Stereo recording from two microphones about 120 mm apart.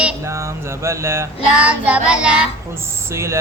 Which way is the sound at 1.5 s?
10° right (ahead or behind).